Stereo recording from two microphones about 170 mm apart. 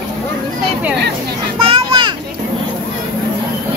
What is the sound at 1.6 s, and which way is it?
Children playing, 30° right (ahead or behind).